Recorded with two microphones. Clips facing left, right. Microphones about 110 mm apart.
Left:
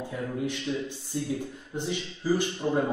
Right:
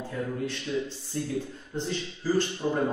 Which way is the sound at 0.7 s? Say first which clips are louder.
Right 3 dB; 20° left (ahead or behind).